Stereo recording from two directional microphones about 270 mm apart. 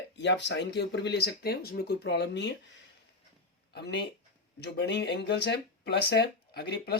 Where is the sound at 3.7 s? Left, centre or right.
Left.